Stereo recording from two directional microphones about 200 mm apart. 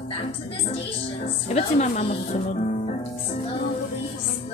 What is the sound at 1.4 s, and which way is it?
Speech, 35° left (ahead or behind).